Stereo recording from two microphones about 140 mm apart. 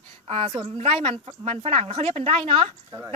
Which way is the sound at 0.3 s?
45° right (ahead or behind).